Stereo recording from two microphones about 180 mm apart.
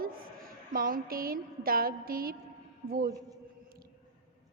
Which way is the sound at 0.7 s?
50° right (ahead or behind).